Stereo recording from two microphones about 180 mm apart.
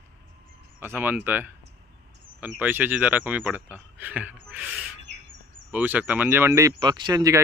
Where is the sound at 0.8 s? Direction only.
10° right (ahead or behind).